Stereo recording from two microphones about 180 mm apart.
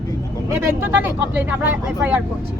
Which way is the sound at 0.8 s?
10° right (ahead or behind).